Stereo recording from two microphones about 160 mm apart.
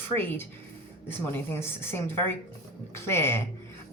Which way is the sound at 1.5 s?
15° left (ahead or behind).